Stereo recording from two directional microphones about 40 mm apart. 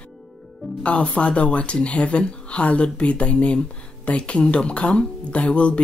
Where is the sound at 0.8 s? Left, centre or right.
Left.